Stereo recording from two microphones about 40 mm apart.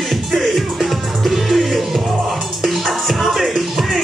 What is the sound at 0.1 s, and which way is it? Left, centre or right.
Music, centre.